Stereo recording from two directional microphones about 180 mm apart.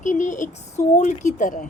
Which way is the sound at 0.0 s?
45° left (ahead or behind).